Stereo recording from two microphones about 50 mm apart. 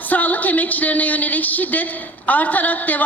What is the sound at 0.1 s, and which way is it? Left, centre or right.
A woman's voice, left.